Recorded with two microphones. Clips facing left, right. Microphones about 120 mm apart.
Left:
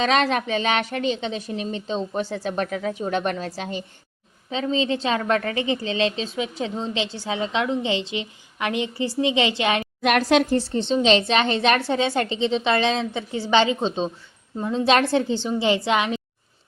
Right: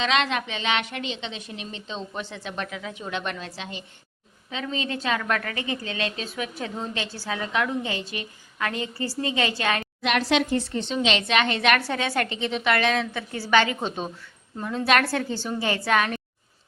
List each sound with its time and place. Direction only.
0.0 s a woman's voice: 40° left (ahead or behind)
4.5 s a woman's voice: 30° left (ahead or behind)
10.0 s a woman's voice: 50° left (ahead or behind); by 16.1 s 20° left (ahead or behind)